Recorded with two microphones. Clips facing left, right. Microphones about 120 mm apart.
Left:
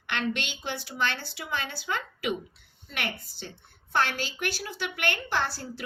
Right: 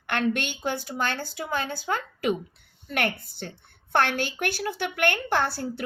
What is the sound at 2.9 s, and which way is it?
A woman's voice, 55° right (ahead or behind).